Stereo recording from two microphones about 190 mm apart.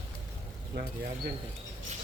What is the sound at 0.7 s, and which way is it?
Speech, 60° right (ahead or behind).